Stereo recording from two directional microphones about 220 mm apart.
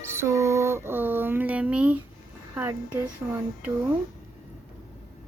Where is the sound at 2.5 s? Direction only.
10° right (ahead or behind).